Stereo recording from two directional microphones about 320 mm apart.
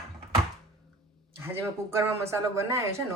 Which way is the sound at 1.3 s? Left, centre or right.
Centre.